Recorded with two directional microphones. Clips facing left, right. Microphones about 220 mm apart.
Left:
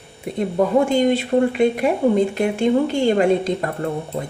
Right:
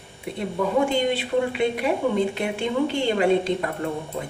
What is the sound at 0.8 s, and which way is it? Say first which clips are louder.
A woman's voice: left 6 dB; 45° left (ahead or behind).